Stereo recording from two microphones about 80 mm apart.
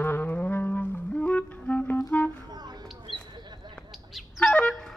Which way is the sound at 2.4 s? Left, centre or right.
Right.